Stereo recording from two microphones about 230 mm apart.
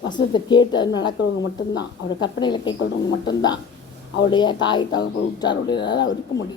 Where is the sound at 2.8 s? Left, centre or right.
Left.